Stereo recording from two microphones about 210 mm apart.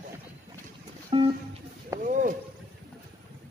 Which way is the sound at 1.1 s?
25° right (ahead or behind).